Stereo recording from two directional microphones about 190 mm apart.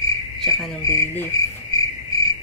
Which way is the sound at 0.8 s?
15° left (ahead or behind).